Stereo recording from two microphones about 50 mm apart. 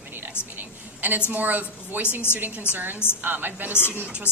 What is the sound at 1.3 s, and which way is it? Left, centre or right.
Speech, right.